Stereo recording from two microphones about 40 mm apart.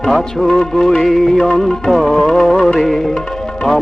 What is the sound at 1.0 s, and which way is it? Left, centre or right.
Music, centre.